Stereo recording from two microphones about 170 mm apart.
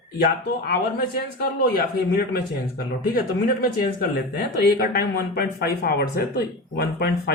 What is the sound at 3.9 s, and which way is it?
Speech, 65° left (ahead or behind).